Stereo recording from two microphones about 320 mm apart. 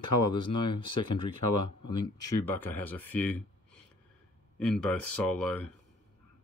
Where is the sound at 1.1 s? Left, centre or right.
Left.